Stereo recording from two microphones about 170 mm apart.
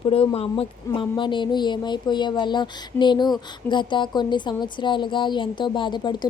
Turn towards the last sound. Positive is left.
turn(degrees=25)  # may be behind; listen again after turning